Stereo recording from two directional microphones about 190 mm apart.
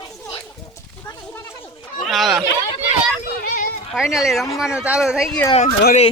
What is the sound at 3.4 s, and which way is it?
Children playing, 50° left (ahead or behind).